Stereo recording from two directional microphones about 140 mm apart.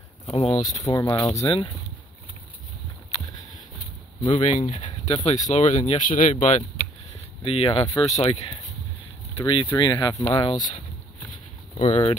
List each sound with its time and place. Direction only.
0.3 s speech: 45° left (ahead or behind)
0.8 s speech: 25° left (ahead or behind)
1.3 s speech: 45° left (ahead or behind)
4.3 s speech: 55° left (ahead or behind)
6.3 s speech: 55° left (ahead or behind)
7.1 s a sound: 45° left (ahead or behind)
8.1 s speech: 45° left (ahead or behind)
11.7 s speech: 50° left (ahead or behind)